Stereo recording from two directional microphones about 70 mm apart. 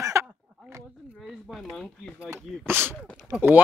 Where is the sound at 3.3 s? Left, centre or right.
Right.